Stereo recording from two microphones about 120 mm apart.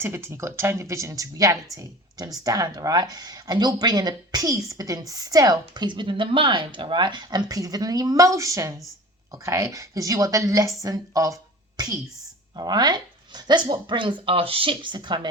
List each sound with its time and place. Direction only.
0.0 s a woman's voice: 20° right (ahead or behind)
11.8 s a sound: 35° right (ahead or behind)
12.5 s speech: 35° right (ahead or behind)